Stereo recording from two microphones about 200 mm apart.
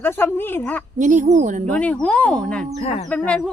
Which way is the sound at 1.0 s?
40° right (ahead or behind).